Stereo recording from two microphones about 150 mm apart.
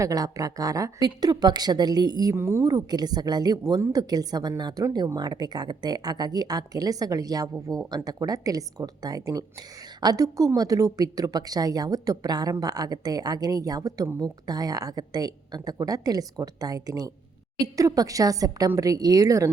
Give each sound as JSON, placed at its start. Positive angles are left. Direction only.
{"t": 0.0, "sound": "speech", "side_deg": -25}
{"t": 2.3, "sound": "speech", "side_deg": -15}